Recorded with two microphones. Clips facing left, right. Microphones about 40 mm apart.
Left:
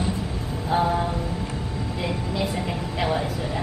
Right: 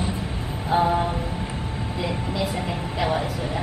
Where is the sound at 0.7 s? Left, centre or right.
Centre.